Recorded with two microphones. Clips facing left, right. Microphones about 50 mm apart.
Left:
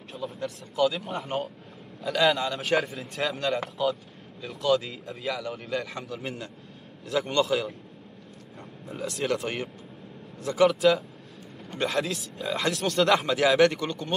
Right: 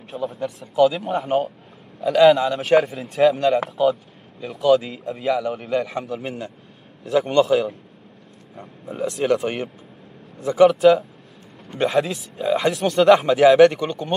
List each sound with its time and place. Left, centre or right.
0.1 s a man's voice: centre
10.4 s a man's voice: centre
10.7 s a man's voice: centre